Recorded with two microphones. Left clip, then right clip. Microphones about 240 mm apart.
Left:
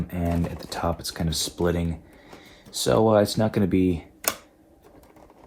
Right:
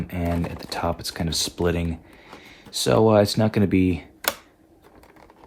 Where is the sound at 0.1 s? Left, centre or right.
Right.